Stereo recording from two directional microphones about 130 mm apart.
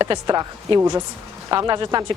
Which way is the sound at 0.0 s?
30° right (ahead or behind).